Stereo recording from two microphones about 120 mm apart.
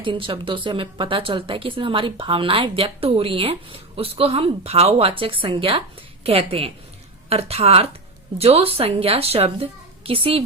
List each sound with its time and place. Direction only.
0.0 s a woman's voice: 45° right (ahead or behind)